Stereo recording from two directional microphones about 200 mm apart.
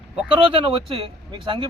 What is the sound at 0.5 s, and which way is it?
Speech, 25° right (ahead or behind).